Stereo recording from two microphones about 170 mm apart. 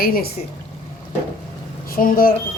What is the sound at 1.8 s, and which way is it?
Speech, 55° left (ahead or behind).